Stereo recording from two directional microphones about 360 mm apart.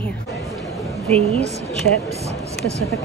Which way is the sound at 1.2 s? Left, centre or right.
Centre.